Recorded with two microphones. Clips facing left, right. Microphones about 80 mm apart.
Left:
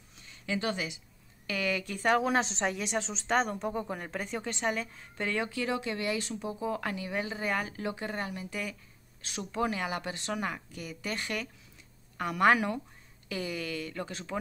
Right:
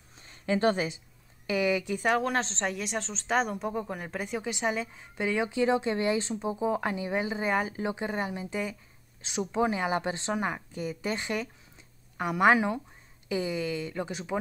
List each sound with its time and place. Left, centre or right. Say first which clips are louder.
0.2 s speech: right 7 dB; right
1.5 s a woman's voice: right 5 dB; centre
2.0 s a woman's voice: left 1 dB; centre